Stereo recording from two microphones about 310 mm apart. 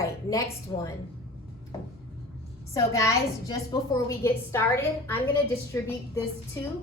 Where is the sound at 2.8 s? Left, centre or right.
Centre.